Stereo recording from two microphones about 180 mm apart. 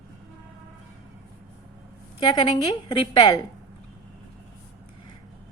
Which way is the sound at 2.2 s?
25° left (ahead or behind).